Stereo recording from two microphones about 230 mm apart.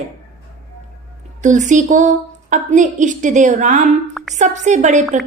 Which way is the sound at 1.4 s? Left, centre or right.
Right.